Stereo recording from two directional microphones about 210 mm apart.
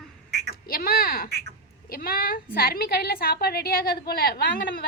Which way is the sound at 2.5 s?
45° left (ahead or behind).